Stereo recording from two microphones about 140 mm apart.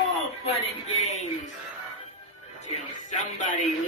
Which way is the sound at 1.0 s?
55° left (ahead or behind).